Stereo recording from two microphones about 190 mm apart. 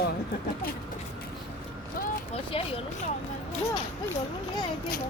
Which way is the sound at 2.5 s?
30° left (ahead or behind).